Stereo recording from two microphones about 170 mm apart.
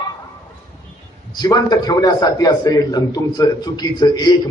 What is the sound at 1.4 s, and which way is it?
A man's voice, 25° left (ahead or behind).